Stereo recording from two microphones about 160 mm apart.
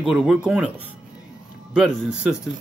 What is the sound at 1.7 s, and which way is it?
Speech, 5° right (ahead or behind).